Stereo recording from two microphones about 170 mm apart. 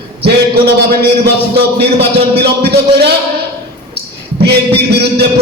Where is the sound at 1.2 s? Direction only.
70° right (ahead or behind).